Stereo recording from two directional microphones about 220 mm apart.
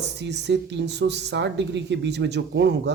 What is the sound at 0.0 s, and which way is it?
A woman's voice, 50° right (ahead or behind).